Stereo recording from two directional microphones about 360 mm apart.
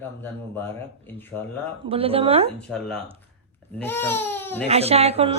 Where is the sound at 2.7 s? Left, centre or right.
Centre.